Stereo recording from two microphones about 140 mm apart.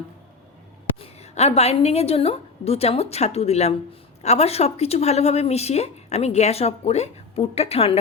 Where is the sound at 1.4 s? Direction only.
50° left (ahead or behind).